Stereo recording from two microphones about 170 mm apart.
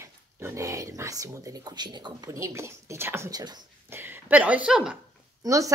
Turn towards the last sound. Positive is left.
turn(degrees=-20)  # may be behind; listen again after turning